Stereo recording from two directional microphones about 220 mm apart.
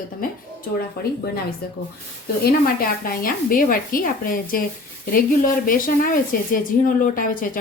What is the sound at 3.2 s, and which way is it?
A woman's voice, 40° left (ahead or behind).